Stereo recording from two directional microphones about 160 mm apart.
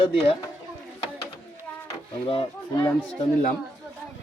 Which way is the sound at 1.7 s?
10° left (ahead or behind).